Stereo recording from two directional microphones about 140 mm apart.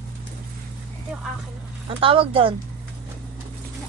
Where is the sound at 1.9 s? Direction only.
40° right (ahead or behind).